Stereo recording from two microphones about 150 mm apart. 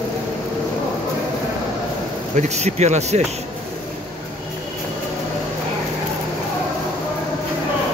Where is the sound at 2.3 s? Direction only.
50° right (ahead or behind).